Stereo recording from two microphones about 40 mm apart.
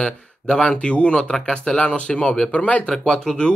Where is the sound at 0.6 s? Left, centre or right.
Left.